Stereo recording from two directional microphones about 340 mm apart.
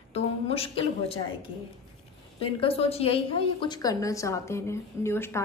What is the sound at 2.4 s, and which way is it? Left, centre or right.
A woman's voice, centre.